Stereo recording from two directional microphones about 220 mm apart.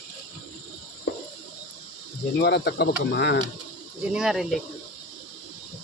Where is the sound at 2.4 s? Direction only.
50° left (ahead or behind).